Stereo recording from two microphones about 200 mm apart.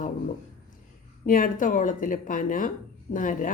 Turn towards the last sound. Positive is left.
turn(degrees=40)  # may be behind; listen again after turning